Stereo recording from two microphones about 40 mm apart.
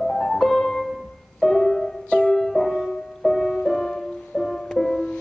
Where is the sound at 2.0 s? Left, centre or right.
Left.